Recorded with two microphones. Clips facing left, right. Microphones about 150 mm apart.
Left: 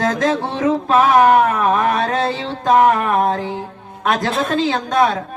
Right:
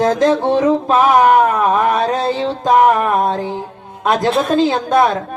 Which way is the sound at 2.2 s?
20° right (ahead or behind).